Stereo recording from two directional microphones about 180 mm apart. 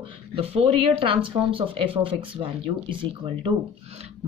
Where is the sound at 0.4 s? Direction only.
30° right (ahead or behind).